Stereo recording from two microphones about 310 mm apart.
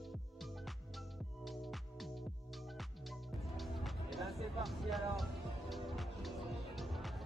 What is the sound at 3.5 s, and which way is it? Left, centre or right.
Music, centre.